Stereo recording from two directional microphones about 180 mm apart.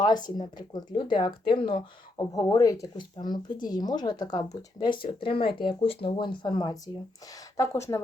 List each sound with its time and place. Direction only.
0.0 s speech: 25° left (ahead or behind)